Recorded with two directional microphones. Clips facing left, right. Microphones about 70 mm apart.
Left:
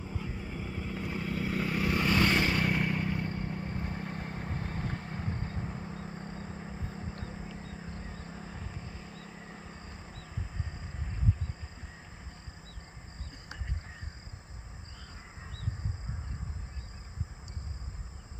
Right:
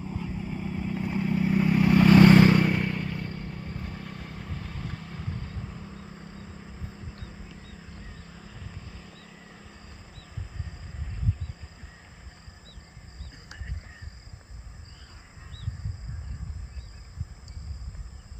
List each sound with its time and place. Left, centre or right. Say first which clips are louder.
0.0 s vehicle: right 5 dB; centre
2.0 s vehicle: right 12 dB; right
2.6 s vehicle: right 5 dB; centre
2.8 s vehicle: even; centre; by 10.2 s left
10.3 s vehicle: even; centre